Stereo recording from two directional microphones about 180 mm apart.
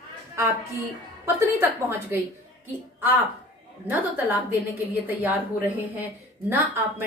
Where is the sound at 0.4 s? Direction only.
15° right (ahead or behind).